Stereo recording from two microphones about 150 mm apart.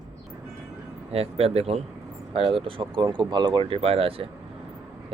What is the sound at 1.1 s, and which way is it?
Speech, 40° right (ahead or behind).